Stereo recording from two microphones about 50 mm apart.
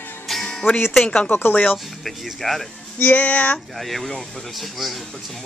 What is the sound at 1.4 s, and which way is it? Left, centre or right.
Speech, left.